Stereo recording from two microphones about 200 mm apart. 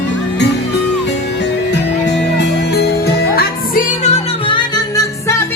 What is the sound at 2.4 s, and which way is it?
Music, 55° left (ahead or behind).